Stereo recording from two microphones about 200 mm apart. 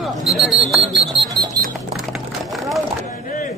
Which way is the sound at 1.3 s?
20° right (ahead or behind).